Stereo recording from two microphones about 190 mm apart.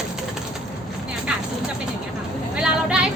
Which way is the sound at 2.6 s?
5° right (ahead or behind).